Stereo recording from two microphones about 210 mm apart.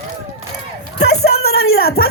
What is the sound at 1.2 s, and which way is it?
Speech, 30° left (ahead or behind).